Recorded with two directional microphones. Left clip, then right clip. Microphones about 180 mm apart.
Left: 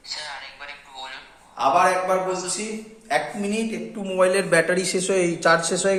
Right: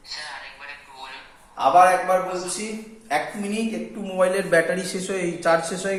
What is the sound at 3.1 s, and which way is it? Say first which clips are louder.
A woman's voice: left 1 dB; 35° left (ahead or behind).